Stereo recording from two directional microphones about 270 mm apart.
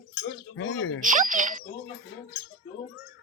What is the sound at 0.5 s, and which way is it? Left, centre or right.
Speech, left.